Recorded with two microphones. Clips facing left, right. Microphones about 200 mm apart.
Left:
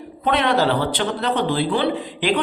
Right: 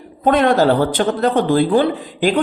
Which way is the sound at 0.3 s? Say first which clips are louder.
Right 5 dB; 45° right (ahead or behind).